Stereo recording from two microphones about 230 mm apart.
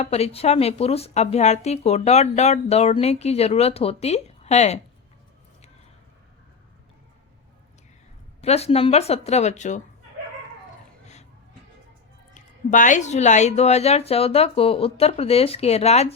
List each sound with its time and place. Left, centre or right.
0.0 s a woman's voice: left
8.4 s a woman's voice: left
12.3 s a woman's voice: left